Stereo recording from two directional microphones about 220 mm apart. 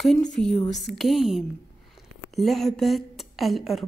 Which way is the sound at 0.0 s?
Centre (ahead or behind).